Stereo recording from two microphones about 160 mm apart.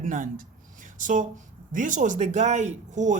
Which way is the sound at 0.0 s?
55° right (ahead or behind).